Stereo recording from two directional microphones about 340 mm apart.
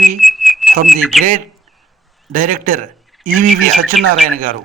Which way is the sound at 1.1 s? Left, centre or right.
Centre.